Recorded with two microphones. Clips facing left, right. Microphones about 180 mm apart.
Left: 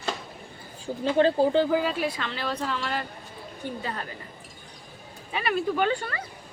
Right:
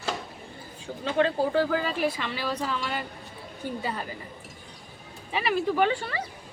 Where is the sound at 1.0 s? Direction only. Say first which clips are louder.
Left 4 dB; 30° left (ahead or behind).